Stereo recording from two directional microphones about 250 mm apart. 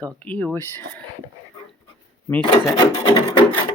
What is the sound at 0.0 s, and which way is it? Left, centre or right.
Speech, centre.